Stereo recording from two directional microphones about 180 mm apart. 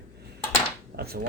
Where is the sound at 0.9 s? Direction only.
60° right (ahead or behind).